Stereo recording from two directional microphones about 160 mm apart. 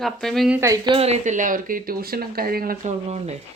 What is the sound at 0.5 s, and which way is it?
Speech, 20° right (ahead or behind).